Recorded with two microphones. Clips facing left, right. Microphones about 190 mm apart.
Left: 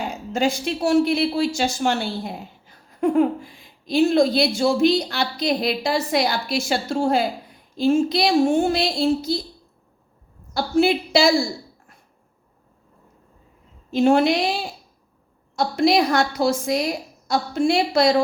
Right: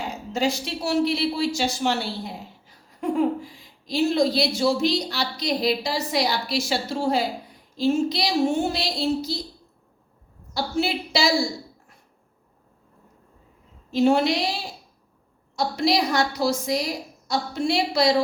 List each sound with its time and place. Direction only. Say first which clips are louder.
0.3 s speech: left 3 dB; 55° left (ahead or behind)
10.5 s speech: left 6 dB; 55° left (ahead or behind)
13.9 s speech: left 3 dB; 50° left (ahead or behind)
15.5 s speech: left 4 dB; 55° left (ahead or behind)